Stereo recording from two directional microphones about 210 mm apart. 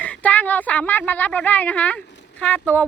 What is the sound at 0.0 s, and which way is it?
Speech, 5° left (ahead or behind).